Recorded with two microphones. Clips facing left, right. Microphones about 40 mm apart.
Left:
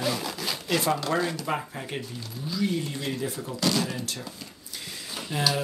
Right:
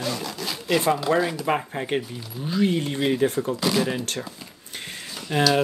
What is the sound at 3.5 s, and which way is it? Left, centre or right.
Speech, centre.